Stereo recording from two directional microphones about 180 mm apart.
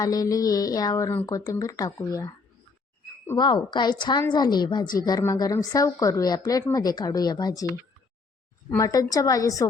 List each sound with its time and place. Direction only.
0.0 s speech: 20° left (ahead or behind)